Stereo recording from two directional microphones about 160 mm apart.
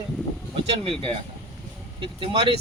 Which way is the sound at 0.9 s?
35° right (ahead or behind).